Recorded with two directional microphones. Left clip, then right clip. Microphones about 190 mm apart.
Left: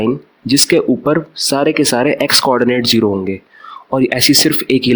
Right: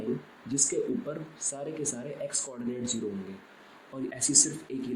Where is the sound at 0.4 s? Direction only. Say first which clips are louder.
Left 18 dB; 55° left (ahead or behind).